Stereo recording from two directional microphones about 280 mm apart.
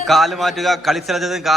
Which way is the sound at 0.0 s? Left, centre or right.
Centre.